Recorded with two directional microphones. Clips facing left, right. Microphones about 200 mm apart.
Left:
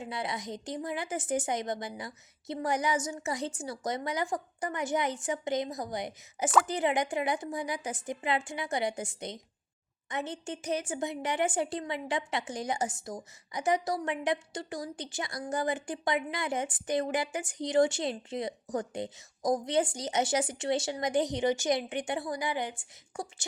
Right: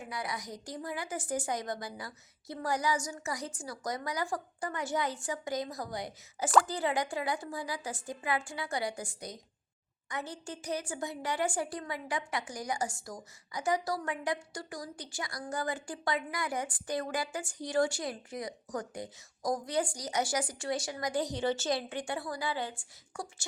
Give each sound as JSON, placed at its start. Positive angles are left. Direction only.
{"t": 0.0, "sound": "a woman's voice", "side_deg": 25}